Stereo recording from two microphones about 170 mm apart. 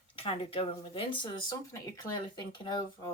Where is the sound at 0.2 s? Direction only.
35° left (ahead or behind).